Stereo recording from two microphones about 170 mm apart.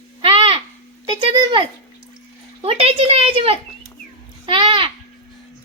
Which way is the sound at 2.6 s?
35° right (ahead or behind).